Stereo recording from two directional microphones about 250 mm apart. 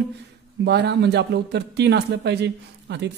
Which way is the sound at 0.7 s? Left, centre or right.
Right.